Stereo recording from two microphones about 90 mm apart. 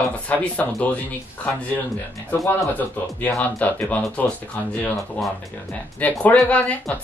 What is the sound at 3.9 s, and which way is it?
Speech, 15° left (ahead or behind).